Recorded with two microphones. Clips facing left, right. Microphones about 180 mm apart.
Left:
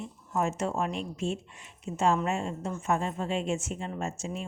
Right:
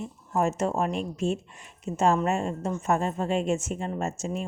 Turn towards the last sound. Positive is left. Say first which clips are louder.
# right 4 dB
turn(degrees=-45)  # may be behind; listen again after turning